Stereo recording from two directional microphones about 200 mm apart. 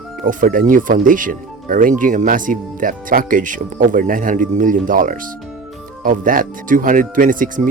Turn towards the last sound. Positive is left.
turn(degrees=-40)  # may be behind; listen again after turning